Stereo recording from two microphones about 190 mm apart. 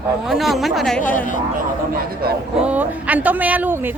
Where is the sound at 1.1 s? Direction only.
45° left (ahead or behind).